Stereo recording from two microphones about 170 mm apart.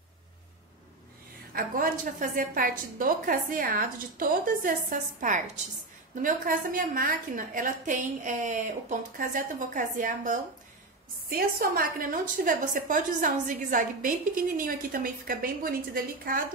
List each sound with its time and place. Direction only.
1.5 s a woman's voice: 60° right (ahead or behind)